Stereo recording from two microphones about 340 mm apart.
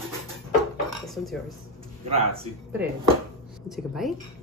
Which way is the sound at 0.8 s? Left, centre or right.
Centre.